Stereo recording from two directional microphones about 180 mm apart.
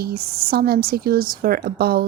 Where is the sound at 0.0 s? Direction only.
60° right (ahead or behind).